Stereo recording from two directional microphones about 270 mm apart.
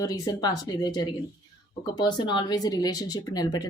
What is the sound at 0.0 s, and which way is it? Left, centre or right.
Speech, centre.